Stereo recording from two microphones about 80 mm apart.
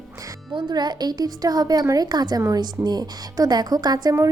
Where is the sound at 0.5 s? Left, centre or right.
Right.